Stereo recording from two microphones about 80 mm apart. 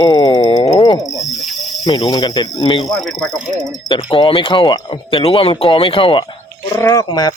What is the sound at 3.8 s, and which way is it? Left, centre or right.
Speech, left.